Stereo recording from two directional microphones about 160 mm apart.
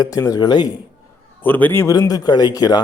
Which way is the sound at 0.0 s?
20° left (ahead or behind).